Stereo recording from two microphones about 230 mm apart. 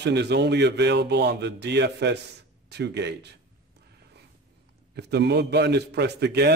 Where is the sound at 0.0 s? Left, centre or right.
Right.